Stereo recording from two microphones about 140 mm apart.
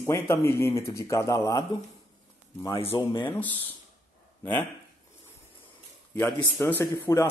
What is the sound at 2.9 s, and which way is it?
Speech, 30° left (ahead or behind).